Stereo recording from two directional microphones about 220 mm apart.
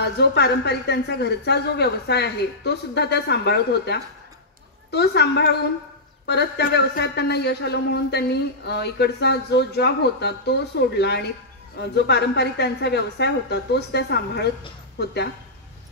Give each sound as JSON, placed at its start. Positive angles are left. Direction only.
{"t": 0.0, "sound": "speech", "side_deg": 50}